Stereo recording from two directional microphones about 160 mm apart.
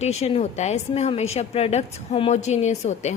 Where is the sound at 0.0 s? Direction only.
45° left (ahead or behind).